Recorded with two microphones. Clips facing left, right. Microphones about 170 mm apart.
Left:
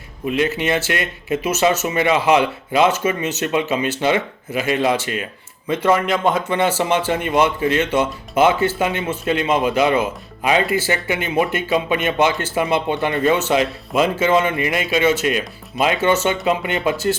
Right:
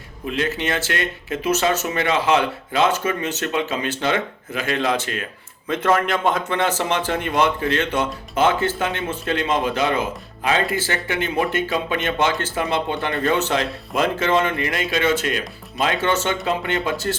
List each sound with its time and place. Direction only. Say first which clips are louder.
0.3 s a man's voice: left 4 dB; 10° left (ahead or behind)
13.5 s a man's voice: left 4 dB; 5° left (ahead or behind)